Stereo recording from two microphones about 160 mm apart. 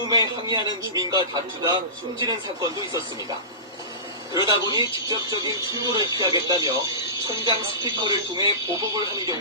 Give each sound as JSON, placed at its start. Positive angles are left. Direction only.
{"t": 0.1, "sound": "speech", "side_deg": -25}
{"t": 4.4, "sound": "speech", "side_deg": -20}